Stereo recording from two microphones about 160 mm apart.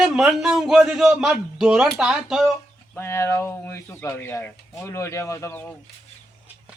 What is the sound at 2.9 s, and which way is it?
Speech, 15° left (ahead or behind).